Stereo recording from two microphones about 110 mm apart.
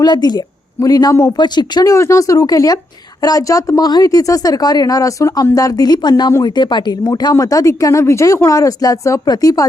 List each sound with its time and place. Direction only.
0.0 s a woman's voice: 40° left (ahead or behind)